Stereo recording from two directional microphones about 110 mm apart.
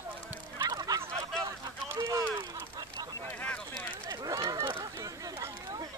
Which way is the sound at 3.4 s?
15° left (ahead or behind).